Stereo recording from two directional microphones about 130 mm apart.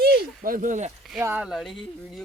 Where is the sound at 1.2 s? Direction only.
15° right (ahead or behind).